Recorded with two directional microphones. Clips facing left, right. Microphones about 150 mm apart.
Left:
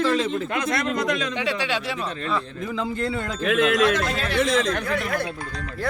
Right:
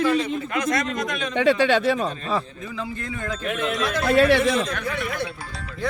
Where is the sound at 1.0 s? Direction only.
75° left (ahead or behind).